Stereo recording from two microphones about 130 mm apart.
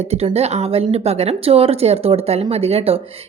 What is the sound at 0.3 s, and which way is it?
A woman's voice, 55° right (ahead or behind).